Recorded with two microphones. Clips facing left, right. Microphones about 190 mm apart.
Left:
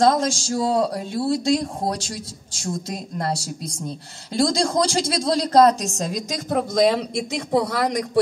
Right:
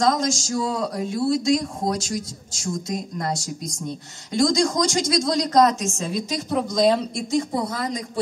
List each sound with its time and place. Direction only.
0.0 s a woman's voice: 30° left (ahead or behind); by 8.2 s 70° left (ahead or behind)